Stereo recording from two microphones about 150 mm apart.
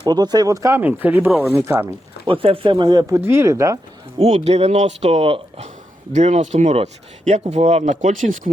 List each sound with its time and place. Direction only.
0.0 s speech: 30° right (ahead or behind)
1.3 s speech: centre (ahead or behind)
1.5 s speech: 15° right (ahead or behind)
2.2 s speech: 35° right (ahead or behind); by 3.8 s 20° right (ahead or behind)
4.2 s speech: 45° right (ahead or behind)